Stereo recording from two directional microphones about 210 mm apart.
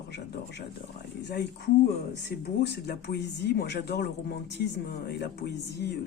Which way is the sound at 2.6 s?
50° left (ahead or behind).